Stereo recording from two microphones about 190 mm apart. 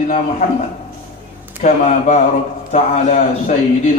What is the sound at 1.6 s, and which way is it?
A man's voice, 40° left (ahead or behind).